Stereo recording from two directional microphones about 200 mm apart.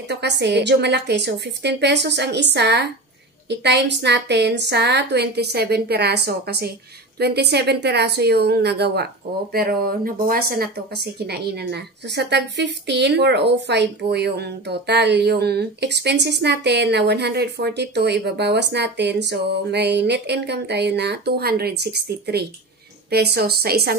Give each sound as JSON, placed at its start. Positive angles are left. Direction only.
{"t": 0.1, "sound": "a woman's voice", "side_deg": -60}